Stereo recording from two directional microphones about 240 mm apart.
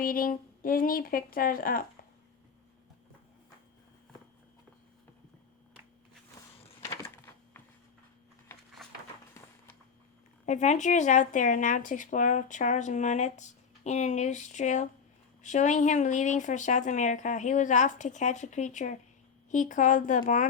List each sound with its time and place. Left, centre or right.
0.0 s speech: left
10.4 s speech: left